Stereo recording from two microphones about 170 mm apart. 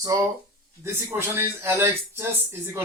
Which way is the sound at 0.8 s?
15° right (ahead or behind).